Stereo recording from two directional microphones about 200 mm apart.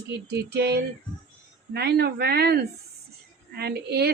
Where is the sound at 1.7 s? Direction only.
55° right (ahead or behind).